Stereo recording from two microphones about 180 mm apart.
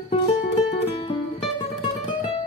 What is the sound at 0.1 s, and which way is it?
Music, 25° left (ahead or behind).